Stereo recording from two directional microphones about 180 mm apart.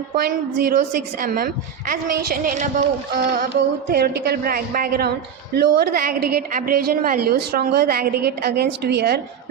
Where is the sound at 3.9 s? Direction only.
60° right (ahead or behind).